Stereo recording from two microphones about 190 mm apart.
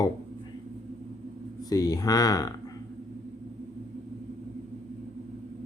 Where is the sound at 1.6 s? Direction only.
20° left (ahead or behind).